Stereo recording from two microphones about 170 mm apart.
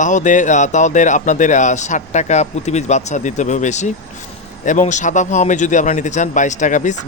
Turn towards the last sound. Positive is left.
turn(degrees=45)  # may be behind; listen again after turning